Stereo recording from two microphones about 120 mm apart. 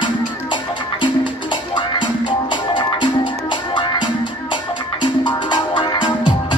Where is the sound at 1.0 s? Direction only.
40° left (ahead or behind).